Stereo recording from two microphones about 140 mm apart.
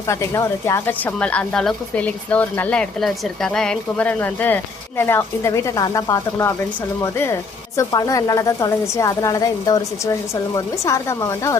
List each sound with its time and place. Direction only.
0.1 s speech: 20° left (ahead or behind)